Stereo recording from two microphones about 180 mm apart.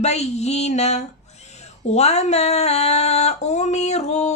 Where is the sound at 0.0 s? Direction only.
35° left (ahead or behind).